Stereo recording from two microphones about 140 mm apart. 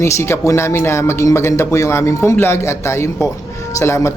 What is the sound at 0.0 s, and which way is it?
Speech, 20° left (ahead or behind).